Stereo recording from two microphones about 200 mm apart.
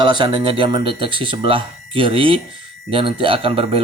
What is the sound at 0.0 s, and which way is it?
Speech, 20° right (ahead or behind).